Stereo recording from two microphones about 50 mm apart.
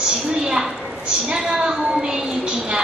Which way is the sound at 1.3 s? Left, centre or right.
Centre.